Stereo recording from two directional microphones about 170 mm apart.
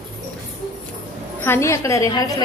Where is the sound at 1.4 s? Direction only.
15° left (ahead or behind).